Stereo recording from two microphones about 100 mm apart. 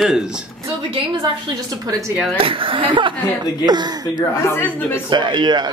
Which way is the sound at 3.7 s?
45° right (ahead or behind).